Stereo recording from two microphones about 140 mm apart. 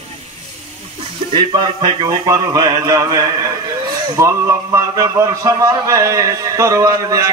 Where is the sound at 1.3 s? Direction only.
35° right (ahead or behind).